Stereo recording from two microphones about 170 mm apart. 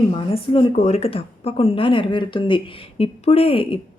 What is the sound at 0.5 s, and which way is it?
Speech, 40° left (ahead or behind).